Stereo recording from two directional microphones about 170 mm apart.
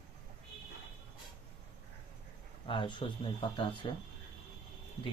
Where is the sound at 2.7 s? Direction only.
30° left (ahead or behind).